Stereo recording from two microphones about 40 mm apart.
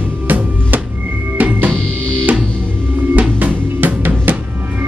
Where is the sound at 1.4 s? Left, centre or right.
Right.